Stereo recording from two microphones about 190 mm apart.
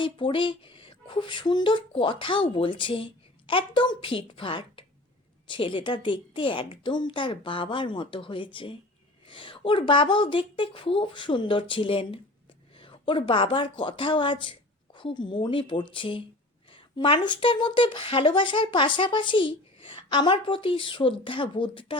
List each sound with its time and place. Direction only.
0.0 s speech: 25° left (ahead or behind)